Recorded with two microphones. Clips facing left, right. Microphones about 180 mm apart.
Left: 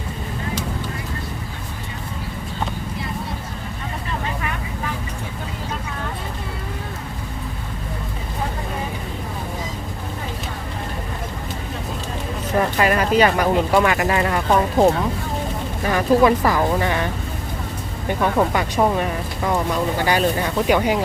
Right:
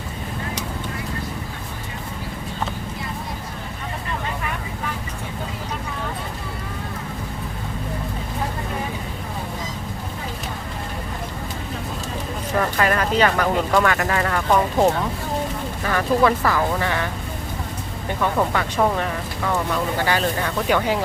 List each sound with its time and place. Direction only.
12.5 s speech: 15° left (ahead or behind)
15.9 s speech: 15° left (ahead or behind)
18.2 s speech: 15° left (ahead or behind)
20.1 s speech: 15° left (ahead or behind)